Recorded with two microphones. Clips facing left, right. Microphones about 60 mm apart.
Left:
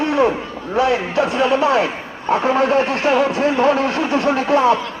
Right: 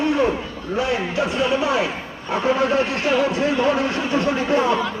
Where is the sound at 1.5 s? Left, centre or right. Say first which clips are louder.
Left 4 dB; left.